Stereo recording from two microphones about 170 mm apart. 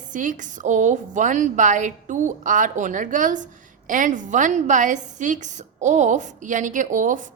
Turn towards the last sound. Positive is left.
turn(degrees=-50)  # may be behind; listen again after turning